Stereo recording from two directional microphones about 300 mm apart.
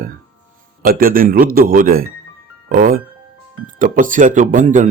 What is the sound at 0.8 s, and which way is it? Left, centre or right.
Speech, right.